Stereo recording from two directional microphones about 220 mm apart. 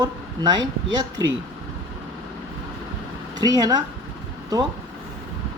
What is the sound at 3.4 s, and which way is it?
Speech, 15° right (ahead or behind).